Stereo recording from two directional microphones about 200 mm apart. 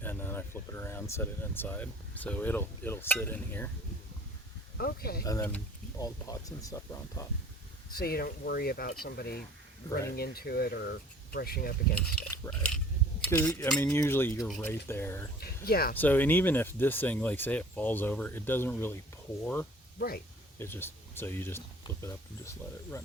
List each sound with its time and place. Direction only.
0.0 s speech: 10° left (ahead or behind)
4.8 s speech: 50° left (ahead or behind)
5.2 s speech: 15° left (ahead or behind)
7.9 s speech: 50° left (ahead or behind)
12.3 s mechanisms: 5° left (ahead or behind)
13.2 s cutlery: 10° left (ahead or behind)
13.7 s speech: 10° left (ahead or behind)
15.4 s speech: 50° left (ahead or behind)
16.0 s speech: 10° left (ahead or behind)
20.0 s speech: 50° left (ahead or behind)
20.6 s speech: 10° left (ahead or behind)